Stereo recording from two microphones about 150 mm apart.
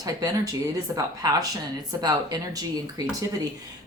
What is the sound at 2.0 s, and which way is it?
Speech, 25° right (ahead or behind).